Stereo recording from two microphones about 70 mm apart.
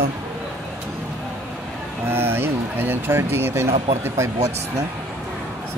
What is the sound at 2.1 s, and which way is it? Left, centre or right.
Speech, right.